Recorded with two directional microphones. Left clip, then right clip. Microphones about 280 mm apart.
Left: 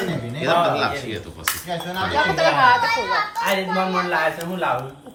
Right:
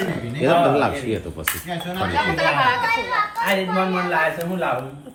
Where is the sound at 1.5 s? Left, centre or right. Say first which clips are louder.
Left 1 dB; left.